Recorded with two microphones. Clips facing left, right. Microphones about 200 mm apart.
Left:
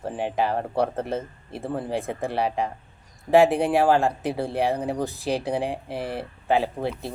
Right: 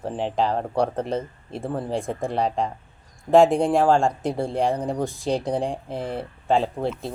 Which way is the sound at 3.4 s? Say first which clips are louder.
Right 2 dB; 60° left (ahead or behind).